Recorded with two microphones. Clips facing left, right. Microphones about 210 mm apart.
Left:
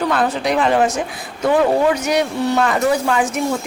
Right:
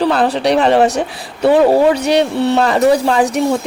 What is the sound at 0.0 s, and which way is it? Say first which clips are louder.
Speech: right 5 dB; 35° right (ahead or behind).